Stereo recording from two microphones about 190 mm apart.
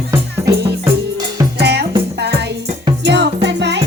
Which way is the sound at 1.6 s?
60° right (ahead or behind).